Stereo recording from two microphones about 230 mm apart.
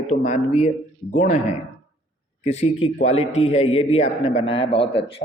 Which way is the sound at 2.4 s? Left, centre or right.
Left.